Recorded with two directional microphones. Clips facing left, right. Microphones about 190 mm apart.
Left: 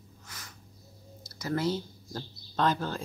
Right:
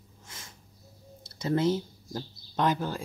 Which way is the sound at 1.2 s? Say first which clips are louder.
Right 4 dB; 25° right (ahead or behind).